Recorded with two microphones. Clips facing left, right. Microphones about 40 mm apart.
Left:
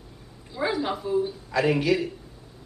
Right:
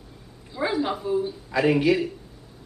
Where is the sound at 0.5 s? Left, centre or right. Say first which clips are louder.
Right 1 dB; centre.